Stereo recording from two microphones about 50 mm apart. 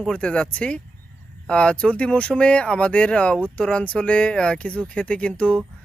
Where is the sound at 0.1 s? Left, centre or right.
Left.